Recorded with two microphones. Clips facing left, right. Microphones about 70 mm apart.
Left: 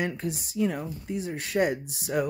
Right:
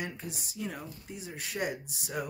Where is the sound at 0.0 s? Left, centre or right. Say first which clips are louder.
Left 9 dB; left.